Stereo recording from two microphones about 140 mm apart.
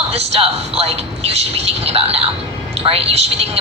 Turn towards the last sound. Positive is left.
turn(degrees=-45)  # may be behind; listen again after turning